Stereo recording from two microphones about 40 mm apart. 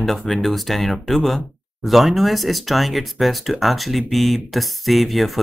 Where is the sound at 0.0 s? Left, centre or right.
Centre.